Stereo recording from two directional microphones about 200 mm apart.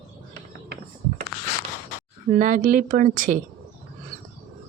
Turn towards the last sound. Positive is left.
turn(degrees=-45)  # may be behind; listen again after turning